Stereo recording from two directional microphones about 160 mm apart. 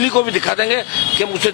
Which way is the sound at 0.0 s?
10° left (ahead or behind).